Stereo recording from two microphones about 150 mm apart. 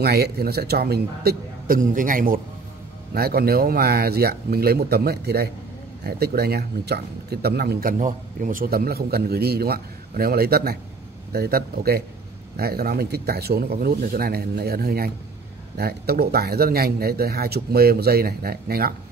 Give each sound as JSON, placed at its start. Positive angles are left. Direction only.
{"t": 0.0, "sound": "speech", "side_deg": -90}
{"t": 3.2, "sound": "speech", "side_deg": -90}